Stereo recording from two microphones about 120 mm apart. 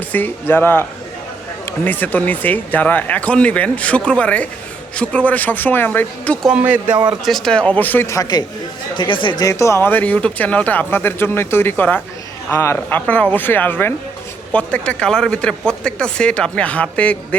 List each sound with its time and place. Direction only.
0.1 s speech: 15° left (ahead or behind)
6.5 s speech: 10° right (ahead or behind)
7.3 s speech: 5° left (ahead or behind); by 8.4 s 30° left (ahead or behind)
9.0 s speech: 45° left (ahead or behind)
9.4 s speech: 25° left (ahead or behind); by 17.2 s 10° left (ahead or behind)